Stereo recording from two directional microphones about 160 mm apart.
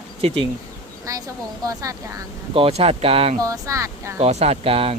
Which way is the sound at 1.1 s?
20° right (ahead or behind).